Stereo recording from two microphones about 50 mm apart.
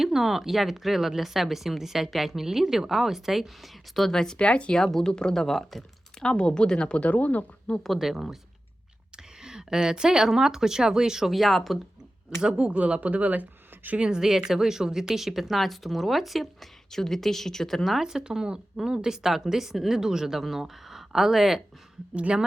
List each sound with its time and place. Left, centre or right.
0.0 s speech: centre
4.4 s a woman's voice: left; by 6.2 s centre
6.2 s a woman's voice: centre
7.9 s speech: centre
12.4 s speech: centre
12.7 s speech: right
14.0 s speech: centre
18.0 s speech: centre
22.1 s a woman's voice: right